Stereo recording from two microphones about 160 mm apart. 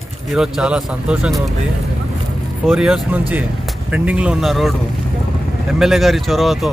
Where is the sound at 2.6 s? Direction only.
5° right (ahead or behind).